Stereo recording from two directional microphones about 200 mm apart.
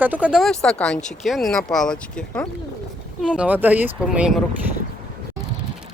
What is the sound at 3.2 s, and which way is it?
Speech, 5° right (ahead or behind).